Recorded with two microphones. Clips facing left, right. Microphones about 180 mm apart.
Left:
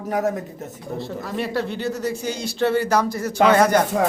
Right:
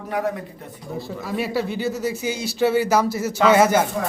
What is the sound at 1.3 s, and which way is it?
A man's voice, 5° right (ahead or behind).